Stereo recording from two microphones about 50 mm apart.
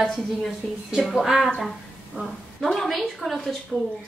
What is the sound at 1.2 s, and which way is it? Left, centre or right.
A woman's voice, centre.